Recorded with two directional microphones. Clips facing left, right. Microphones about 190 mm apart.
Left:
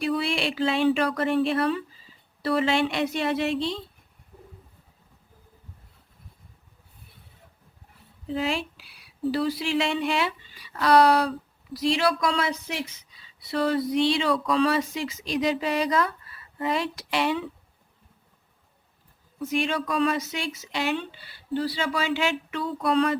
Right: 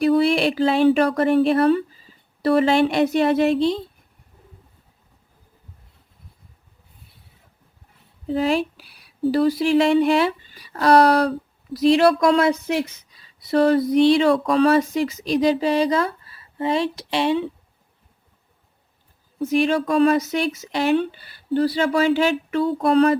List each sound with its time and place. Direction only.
0.0 s speech: 40° right (ahead or behind)
8.4 s speech: 40° right (ahead or behind)
11.3 s speech: 55° right (ahead or behind); by 17.5 s 25° right (ahead or behind)
19.4 s speech: 35° right (ahead or behind)